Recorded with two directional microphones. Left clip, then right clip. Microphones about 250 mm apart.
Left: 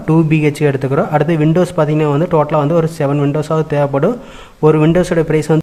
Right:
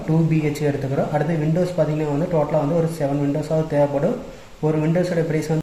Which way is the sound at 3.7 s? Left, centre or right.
Left.